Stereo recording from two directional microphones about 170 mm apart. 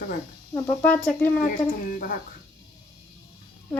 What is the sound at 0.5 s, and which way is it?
Speech, 10° left (ahead or behind).